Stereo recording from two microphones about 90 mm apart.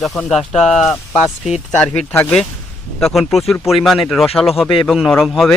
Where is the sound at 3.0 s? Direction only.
Centre (ahead or behind).